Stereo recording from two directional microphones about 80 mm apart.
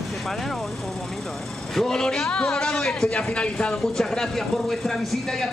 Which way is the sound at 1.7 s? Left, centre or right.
Centre.